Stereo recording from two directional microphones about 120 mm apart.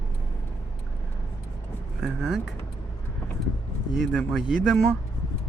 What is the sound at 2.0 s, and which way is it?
Speech, centre (ahead or behind).